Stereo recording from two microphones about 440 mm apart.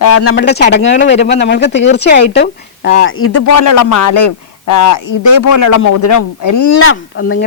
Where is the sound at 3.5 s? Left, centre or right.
Left.